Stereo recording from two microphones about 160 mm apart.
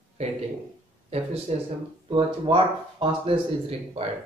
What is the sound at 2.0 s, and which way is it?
Speech, 30° right (ahead or behind).